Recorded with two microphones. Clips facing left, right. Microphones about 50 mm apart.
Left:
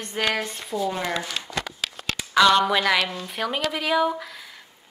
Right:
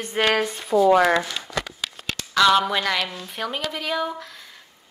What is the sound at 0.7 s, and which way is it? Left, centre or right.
Speech, right.